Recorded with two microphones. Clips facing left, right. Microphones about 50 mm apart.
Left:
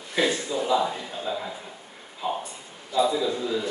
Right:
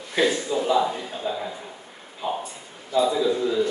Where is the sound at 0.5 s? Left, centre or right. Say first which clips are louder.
Right 2 dB; centre.